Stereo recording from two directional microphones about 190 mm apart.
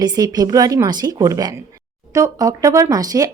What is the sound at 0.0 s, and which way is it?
A woman's voice, 20° right (ahead or behind).